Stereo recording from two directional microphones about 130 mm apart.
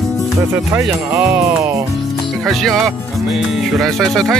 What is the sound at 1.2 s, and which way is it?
Music, 20° right (ahead or behind).